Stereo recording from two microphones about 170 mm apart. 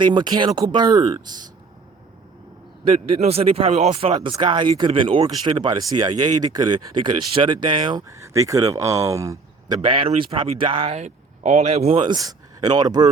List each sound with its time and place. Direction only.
0.0 s speech: 25° right (ahead or behind)
2.9 s speech: 35° right (ahead or behind)